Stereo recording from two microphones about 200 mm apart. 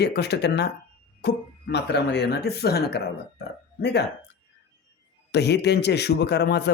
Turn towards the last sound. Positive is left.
turn(degrees=55)  # may be behind; listen again after turning